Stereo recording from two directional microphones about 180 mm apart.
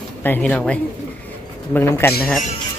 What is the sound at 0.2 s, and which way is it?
Speech, 10° left (ahead or behind).